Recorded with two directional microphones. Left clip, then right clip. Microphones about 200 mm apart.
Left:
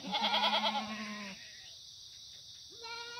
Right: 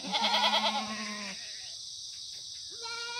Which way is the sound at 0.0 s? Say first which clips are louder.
Right 4 dB; 5° left (ahead or behind).